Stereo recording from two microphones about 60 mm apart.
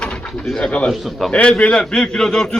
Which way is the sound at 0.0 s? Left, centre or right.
Left.